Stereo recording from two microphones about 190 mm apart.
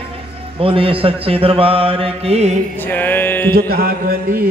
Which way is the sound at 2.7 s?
10° left (ahead or behind).